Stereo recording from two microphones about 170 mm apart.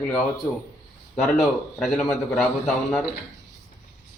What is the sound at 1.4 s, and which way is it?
A man's voice, centre (ahead or behind).